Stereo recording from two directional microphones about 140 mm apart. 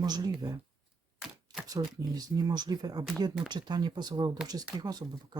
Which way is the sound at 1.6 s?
25° right (ahead or behind).